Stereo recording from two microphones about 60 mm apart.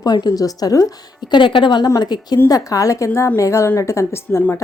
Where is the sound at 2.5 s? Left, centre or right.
Left.